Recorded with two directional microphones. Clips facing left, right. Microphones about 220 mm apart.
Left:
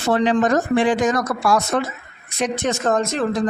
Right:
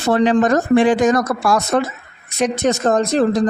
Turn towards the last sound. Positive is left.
turn(degrees=-35)  # may be behind; listen again after turning